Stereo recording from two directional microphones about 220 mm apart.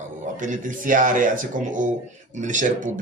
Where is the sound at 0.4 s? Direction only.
35° right (ahead or behind).